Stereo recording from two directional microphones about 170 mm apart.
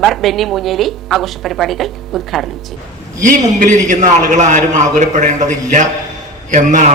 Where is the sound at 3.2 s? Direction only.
50° right (ahead or behind).